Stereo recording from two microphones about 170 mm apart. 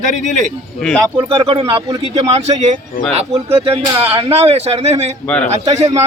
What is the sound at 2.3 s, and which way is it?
A man's voice, 45° right (ahead or behind).